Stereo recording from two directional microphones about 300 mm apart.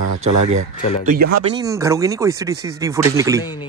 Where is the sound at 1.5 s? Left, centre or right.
Centre.